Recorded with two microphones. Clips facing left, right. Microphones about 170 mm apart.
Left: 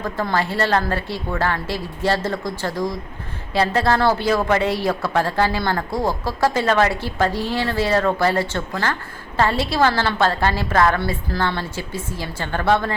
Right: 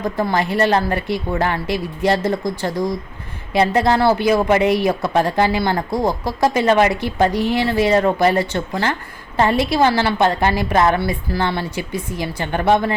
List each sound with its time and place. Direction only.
0.0 s a woman's voice: 15° right (ahead or behind)